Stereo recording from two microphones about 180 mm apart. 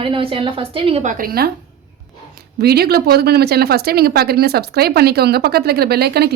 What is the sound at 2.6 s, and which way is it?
Speech, 60° right (ahead or behind).